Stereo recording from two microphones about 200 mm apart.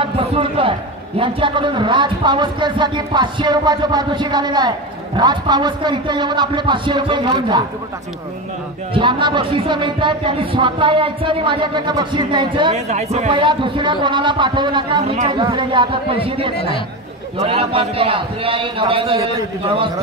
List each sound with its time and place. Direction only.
0.0 s a man's voice: 25° right (ahead or behind)
8.9 s a man's voice: 25° right (ahead or behind)
12.7 s a man's voice: 35° right (ahead or behind)